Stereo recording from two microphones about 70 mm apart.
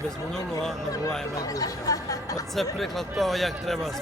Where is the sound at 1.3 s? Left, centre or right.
Left.